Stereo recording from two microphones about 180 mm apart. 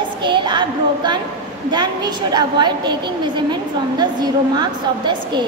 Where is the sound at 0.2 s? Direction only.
25° right (ahead or behind).